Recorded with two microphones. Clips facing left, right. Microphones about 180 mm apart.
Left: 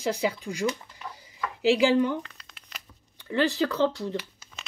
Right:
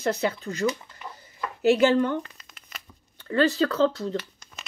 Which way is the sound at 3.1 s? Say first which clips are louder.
Right 3 dB; 15° left (ahead or behind).